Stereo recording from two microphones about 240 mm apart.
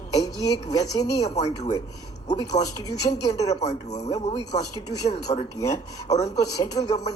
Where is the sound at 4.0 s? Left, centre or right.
Centre.